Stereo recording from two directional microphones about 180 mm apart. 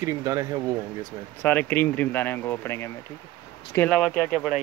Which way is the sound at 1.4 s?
10° left (ahead or behind).